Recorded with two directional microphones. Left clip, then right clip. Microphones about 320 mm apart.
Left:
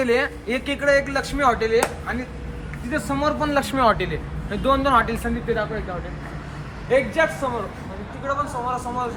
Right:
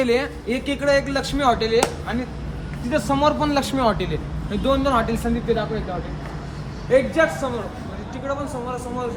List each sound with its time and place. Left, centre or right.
0.0 s a man's voice: centre
6.9 s a man's voice: left
8.3 s a man's voice: centre